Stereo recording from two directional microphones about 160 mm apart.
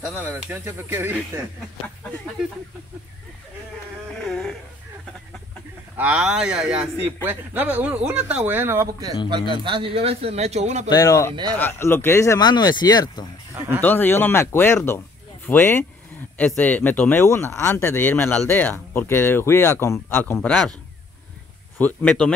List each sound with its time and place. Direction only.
0.0 s a man's voice: 10° right (ahead or behind)
4.2 s a sound: centre (ahead or behind)
5.9 s a man's voice: 5° right (ahead or behind)
9.7 s a man's voice: 35° right (ahead or behind)
10.9 s speech: 20° left (ahead or behind)
13.6 s a sound: 15° right (ahead or behind)
13.8 s speech: 15° left (ahead or behind)
21.7 s speech: 10° left (ahead or behind)